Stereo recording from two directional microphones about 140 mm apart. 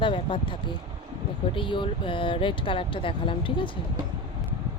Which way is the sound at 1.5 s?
35° left (ahead or behind).